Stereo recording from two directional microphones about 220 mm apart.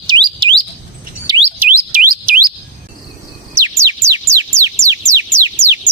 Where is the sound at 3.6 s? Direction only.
15° right (ahead or behind).